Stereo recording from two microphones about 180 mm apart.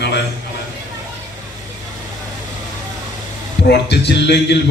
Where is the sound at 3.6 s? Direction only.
70° left (ahead or behind).